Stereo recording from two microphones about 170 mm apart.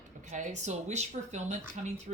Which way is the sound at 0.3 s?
45° right (ahead or behind).